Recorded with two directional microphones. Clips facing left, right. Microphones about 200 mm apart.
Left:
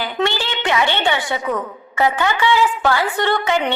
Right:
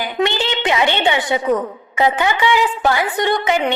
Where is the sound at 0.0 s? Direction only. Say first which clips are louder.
Right 2 dB; 15° right (ahead or behind).